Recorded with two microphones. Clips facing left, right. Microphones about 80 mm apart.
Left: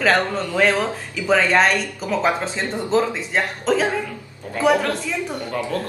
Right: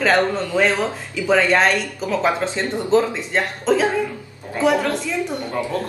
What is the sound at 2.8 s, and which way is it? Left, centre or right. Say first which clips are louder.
Speech: right 2 dB; centre.